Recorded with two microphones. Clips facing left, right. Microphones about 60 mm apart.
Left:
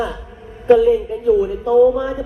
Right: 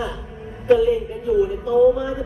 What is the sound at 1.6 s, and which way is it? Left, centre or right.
Speech, left.